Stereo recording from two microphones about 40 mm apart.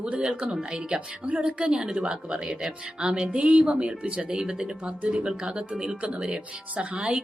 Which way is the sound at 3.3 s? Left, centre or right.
Right.